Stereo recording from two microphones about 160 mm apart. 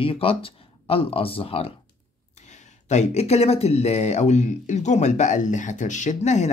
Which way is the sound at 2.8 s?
45° left (ahead or behind).